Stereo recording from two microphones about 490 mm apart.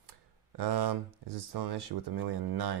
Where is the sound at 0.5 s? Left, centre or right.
Right.